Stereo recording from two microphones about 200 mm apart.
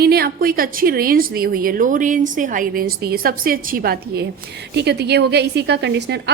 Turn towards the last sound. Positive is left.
turn(degrees=-60)  # may be behind; listen again after turning